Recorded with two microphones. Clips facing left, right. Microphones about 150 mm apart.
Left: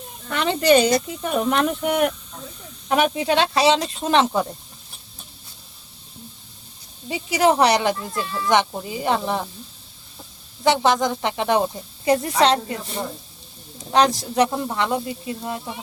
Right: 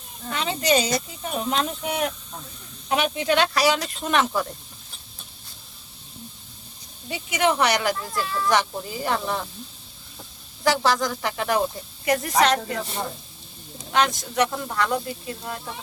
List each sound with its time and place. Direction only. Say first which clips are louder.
0.3 s speech: left 6 dB; 60° left (ahead or behind)
3.2 s speech: left 2 dB; 30° left (ahead or behind)
7.1 s speech: left 4 dB; 35° left (ahead or behind)
10.6 s speech: left 3 dB; 20° left (ahead or behind)
13.9 s speech: left 4 dB; 35° left (ahead or behind)